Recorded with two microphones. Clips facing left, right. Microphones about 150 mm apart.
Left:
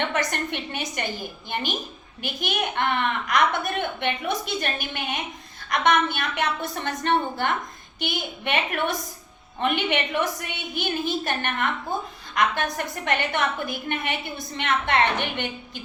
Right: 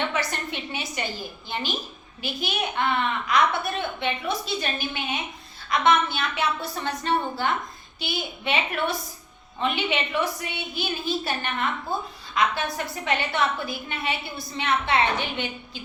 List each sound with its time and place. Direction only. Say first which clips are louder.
0.3 s a woman's voice: left 2 dB; 55° left (ahead or behind)